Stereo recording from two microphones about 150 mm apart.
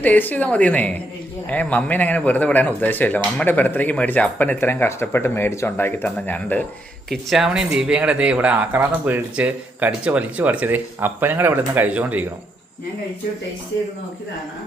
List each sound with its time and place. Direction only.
0.0 s speech: 10° left (ahead or behind)
7.1 s speech: centre (ahead or behind)